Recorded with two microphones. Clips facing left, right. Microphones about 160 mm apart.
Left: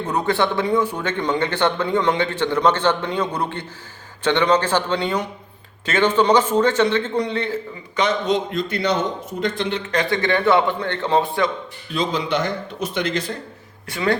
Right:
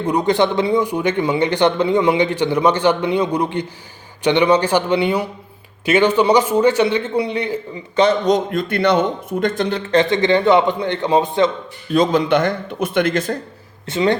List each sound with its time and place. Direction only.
0.0 s speech: 15° right (ahead or behind)
7.9 s a man's voice: 30° right (ahead or behind)
8.5 s a man's voice: 55° right (ahead or behind)
9.4 s a man's voice: 45° right (ahead or behind); by 11.5 s 20° right (ahead or behind)
11.9 s speech: 50° right (ahead or behind)
13.8 s a man's voice: 20° right (ahead or behind)